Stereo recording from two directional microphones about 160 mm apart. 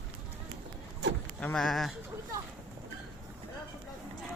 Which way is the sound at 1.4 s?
5° left (ahead or behind).